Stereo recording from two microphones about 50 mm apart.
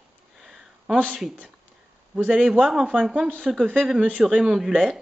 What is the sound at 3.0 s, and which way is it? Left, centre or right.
Speech, centre.